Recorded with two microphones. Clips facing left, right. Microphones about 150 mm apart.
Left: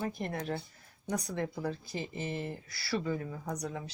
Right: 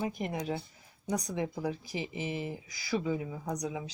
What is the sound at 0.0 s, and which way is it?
Speech, 10° right (ahead or behind).